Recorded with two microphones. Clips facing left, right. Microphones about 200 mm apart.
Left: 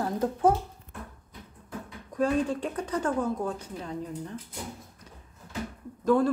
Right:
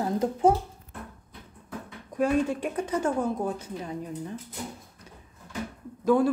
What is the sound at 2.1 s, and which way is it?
Speech, 10° right (ahead or behind).